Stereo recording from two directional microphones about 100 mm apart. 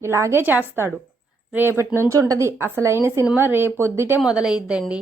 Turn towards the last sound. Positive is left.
turn(degrees=-10)  # may be behind; listen again after turning